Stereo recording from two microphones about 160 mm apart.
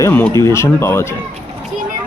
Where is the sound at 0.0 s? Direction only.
15° left (ahead or behind).